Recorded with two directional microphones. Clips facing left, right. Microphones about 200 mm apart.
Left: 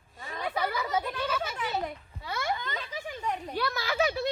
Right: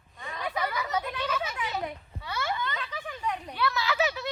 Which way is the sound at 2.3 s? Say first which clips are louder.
Even; 45° left (ahead or behind).